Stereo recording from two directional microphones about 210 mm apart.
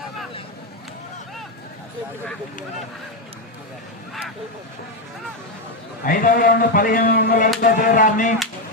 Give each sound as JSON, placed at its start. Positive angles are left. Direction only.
{"t": 6.1, "sound": "speech", "side_deg": 40}